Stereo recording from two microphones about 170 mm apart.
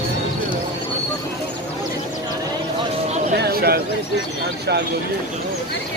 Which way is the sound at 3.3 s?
65° right (ahead or behind).